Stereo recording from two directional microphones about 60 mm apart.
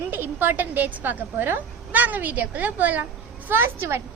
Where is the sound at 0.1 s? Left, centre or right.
Right.